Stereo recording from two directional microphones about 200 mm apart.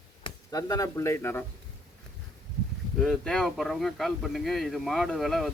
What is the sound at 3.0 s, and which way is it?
Speech, 5° left (ahead or behind).